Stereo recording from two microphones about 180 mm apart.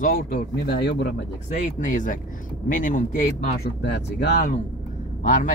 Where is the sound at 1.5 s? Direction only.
45° left (ahead or behind).